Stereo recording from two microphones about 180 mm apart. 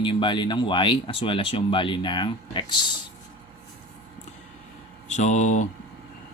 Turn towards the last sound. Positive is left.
turn(degrees=40)  # may be behind; listen again after turning